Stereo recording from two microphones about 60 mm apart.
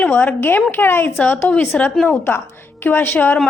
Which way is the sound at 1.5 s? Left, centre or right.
Left.